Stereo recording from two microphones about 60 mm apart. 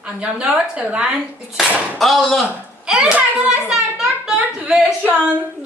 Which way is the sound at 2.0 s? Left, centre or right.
Centre.